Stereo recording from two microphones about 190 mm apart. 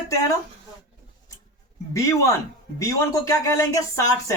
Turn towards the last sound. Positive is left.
turn(degrees=15)  # may be behind; listen again after turning